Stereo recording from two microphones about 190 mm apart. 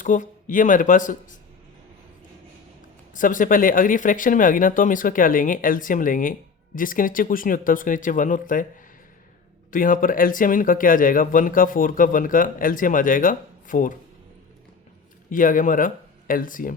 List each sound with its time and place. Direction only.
0.0 s speech: 45° left (ahead or behind)
3.2 s speech: 45° left (ahead or behind)
9.7 s speech: 45° left (ahead or behind)
15.3 s speech: 45° left (ahead or behind)